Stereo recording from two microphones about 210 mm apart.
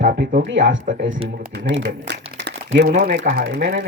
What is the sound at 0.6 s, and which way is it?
Speech, 65° right (ahead or behind).